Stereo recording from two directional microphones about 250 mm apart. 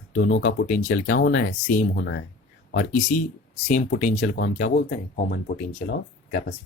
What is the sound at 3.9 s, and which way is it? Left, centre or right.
Speech, left.